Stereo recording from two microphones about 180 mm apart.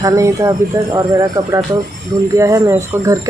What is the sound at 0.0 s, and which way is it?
A woman's voice, 20° right (ahead or behind).